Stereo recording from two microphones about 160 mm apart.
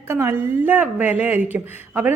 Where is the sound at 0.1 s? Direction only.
15° right (ahead or behind).